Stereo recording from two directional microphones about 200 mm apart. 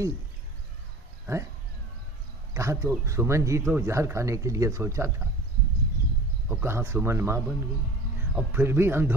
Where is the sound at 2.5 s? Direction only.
15° right (ahead or behind).